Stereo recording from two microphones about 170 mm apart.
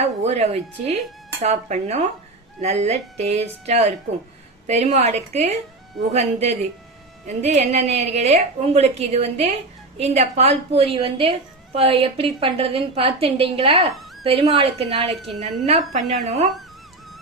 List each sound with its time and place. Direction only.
0.0 s a woman's voice: 40° right (ahead or behind)
15.9 s speech: 45° right (ahead or behind)